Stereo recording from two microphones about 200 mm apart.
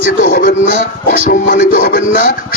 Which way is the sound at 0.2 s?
45° left (ahead or behind).